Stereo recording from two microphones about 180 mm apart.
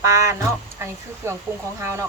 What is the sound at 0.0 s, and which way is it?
Speech, 15° right (ahead or behind).